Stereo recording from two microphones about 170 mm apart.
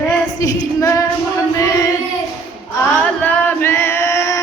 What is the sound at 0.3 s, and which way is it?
Female singing, 20° left (ahead or behind).